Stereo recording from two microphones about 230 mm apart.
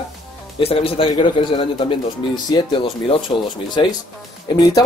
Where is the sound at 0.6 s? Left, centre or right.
Left.